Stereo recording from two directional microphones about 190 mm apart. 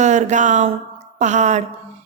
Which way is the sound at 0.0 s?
40° right (ahead or behind).